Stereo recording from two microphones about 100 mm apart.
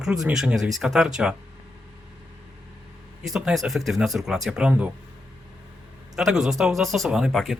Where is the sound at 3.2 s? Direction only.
Centre (ahead or behind).